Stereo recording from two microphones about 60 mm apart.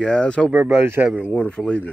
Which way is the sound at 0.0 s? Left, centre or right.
Centre.